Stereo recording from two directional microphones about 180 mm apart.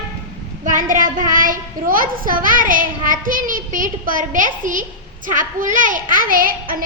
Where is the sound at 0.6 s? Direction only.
45° right (ahead or behind).